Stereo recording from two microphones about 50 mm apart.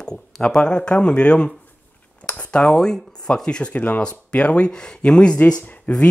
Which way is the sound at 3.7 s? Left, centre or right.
Left.